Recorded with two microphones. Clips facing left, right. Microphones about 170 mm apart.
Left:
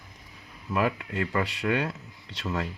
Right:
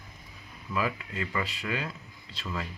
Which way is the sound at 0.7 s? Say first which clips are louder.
Left 4 dB; 65° left (ahead or behind).